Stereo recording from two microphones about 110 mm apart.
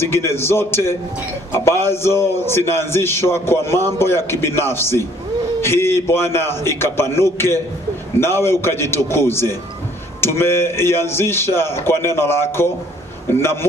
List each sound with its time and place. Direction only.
0.0 s a man's voice: 25° left (ahead or behind)